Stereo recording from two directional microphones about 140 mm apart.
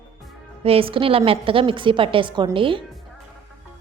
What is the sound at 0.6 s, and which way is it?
A woman's voice, 40° right (ahead or behind).